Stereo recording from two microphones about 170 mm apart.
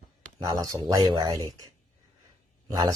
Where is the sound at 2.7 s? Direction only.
25° right (ahead or behind).